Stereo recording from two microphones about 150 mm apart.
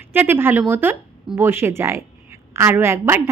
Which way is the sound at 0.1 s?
15° right (ahead or behind).